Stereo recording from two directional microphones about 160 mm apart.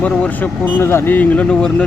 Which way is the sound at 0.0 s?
10° left (ahead or behind).